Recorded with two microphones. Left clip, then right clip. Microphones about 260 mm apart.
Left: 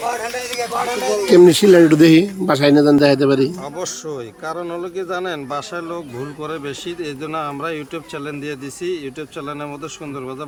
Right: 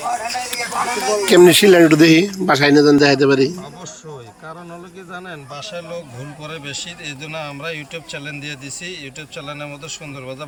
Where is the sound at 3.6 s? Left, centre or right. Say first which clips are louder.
Left 8 dB; left.